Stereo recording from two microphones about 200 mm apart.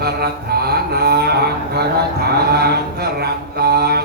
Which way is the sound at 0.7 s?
55° right (ahead or behind).